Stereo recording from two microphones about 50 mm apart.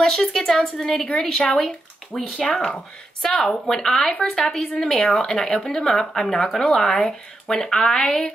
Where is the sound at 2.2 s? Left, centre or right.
Left.